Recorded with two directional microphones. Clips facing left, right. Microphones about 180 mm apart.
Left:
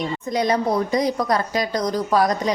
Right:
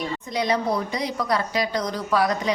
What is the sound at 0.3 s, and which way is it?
Speech, 45° left (ahead or behind).